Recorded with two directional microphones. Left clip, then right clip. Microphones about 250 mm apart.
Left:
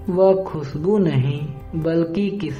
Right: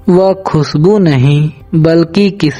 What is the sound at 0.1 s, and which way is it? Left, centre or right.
A man's voice, right.